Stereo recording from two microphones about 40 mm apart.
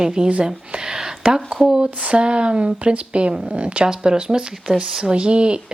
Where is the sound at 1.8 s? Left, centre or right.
Right.